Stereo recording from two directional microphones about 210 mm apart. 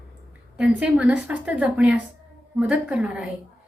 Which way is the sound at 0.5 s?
5° right (ahead or behind).